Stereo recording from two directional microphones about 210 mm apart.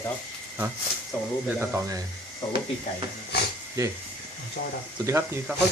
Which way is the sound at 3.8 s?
15° right (ahead or behind).